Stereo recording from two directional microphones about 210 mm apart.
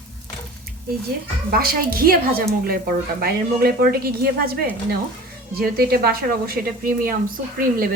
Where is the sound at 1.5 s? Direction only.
45° right (ahead or behind).